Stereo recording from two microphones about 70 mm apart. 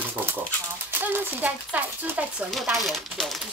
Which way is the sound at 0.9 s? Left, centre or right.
Right.